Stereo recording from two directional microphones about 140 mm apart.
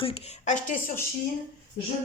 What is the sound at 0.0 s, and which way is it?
Speech, 45° left (ahead or behind).